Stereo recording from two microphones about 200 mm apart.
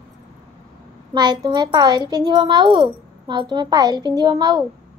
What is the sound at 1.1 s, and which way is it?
A child's voice, 20° right (ahead or behind).